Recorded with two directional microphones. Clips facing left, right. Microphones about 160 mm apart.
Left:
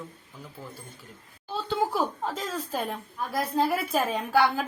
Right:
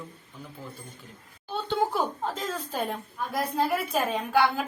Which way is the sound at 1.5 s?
Centre (ahead or behind).